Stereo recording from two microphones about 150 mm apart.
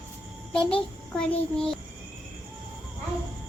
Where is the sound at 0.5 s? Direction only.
5° left (ahead or behind).